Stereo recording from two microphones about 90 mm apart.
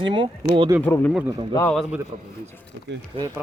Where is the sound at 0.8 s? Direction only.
20° left (ahead or behind).